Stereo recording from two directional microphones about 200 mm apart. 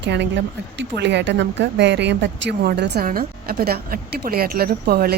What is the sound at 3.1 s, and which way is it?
A woman's voice, 50° right (ahead or behind).